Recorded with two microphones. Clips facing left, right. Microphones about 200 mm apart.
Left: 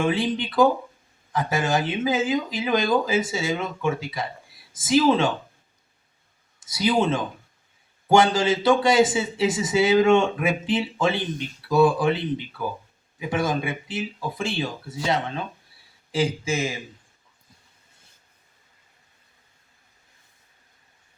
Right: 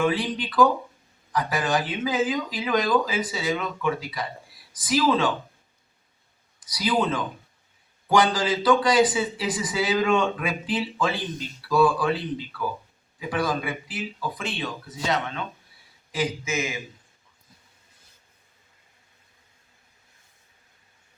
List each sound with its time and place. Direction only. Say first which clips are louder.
0.0 s a man's voice: left 1 dB; 25° left (ahead or behind)
6.6 s a man's voice: left 3 dB; 25° left (ahead or behind)